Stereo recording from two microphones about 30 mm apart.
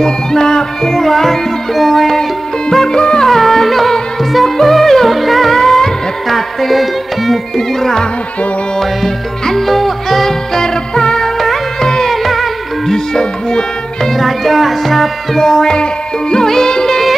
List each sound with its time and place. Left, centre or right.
0.0 s music: left; by 2.1 s centre
2.7 s music: centre
3.0 s music: left
3.3 s music: centre
5.5 s music: centre
7.5 s music: centre
9.6 s music: centre; by 12.1 s left
12.1 s music: centre
12.8 s music: centre
14.1 s music: centre
15.3 s music: centre